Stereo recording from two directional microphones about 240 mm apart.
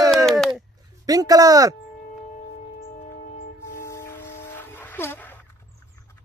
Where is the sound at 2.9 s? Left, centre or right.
Left.